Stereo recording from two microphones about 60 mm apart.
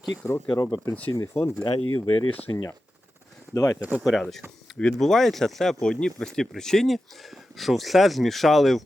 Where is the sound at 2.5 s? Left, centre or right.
Left.